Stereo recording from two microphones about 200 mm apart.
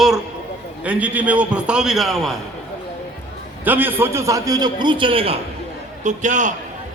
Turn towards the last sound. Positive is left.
turn(degrees=-40)  # may be behind; listen again after turning